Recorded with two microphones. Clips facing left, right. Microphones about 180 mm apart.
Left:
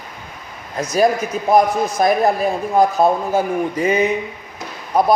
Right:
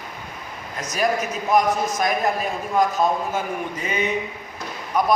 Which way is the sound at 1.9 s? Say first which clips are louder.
Left 7 dB; 35° left (ahead or behind).